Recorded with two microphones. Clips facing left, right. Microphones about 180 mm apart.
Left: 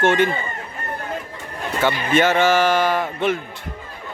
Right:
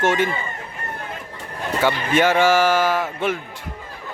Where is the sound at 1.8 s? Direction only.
10° right (ahead or behind).